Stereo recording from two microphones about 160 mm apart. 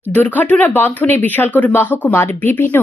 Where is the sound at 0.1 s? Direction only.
10° left (ahead or behind).